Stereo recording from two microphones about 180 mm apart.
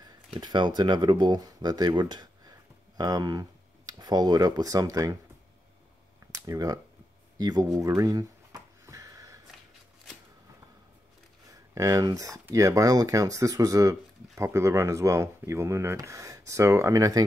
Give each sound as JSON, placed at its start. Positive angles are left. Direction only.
{"t": 0.4, "sound": "speech", "side_deg": -25}
{"t": 6.4, "sound": "speech", "side_deg": -20}
{"t": 7.3, "sound": "a sound", "side_deg": -20}
{"t": 11.7, "sound": "speech", "side_deg": -20}